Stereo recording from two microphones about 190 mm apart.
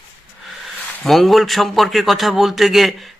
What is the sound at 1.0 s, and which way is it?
A man's voice, centre (ahead or behind).